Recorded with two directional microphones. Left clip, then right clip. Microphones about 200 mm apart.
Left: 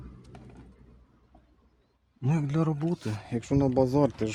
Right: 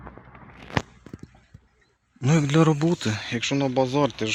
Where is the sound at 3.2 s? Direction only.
10° left (ahead or behind).